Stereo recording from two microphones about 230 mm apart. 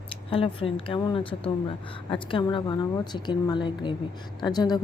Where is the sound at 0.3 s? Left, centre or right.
Left.